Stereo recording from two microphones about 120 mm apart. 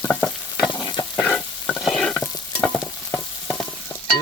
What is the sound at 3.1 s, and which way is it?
Frying, 10° left (ahead or behind).